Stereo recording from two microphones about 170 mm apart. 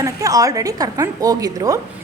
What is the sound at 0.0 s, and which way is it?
A woman's voice, 20° right (ahead or behind).